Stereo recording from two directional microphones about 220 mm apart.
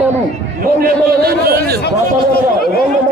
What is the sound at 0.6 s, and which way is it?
A man's voice, 45° right (ahead or behind).